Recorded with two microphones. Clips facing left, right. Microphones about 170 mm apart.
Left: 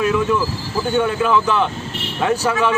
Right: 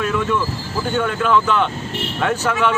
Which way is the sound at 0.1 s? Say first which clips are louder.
Left 2 dB; 10° left (ahead or behind).